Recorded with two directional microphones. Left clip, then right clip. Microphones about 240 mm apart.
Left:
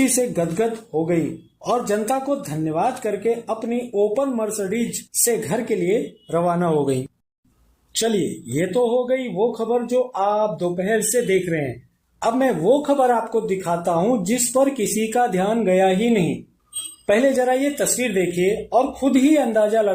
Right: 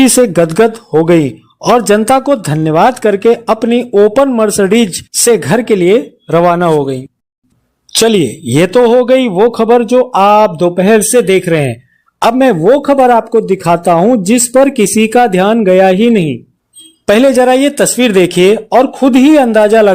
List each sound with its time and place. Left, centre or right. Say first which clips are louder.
0.0 s speech: right 13 dB; right
8.5 s speech: right 13 dB; right